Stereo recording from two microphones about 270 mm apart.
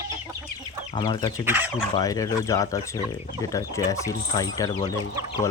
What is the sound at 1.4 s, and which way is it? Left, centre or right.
Speech, centre.